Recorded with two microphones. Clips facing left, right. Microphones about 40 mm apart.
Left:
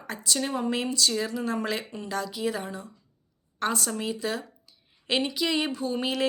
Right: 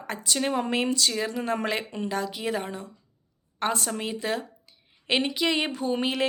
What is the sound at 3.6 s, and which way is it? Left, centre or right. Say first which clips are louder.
Speech: right 1 dB; right.